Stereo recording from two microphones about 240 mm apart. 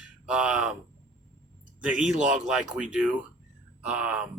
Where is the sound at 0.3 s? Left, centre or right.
Centre.